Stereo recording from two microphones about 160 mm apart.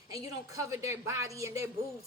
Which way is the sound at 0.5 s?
20° right (ahead or behind).